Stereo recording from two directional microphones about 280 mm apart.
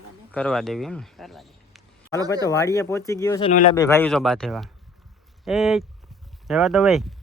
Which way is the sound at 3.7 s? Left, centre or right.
Centre.